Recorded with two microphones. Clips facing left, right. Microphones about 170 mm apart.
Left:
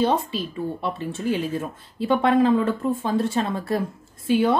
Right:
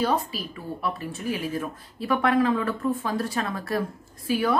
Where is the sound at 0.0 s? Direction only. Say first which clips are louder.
Left 3 dB; 25° left (ahead or behind).